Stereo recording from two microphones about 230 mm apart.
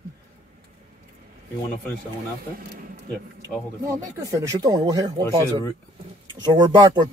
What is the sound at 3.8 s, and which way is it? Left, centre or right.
Speech, centre.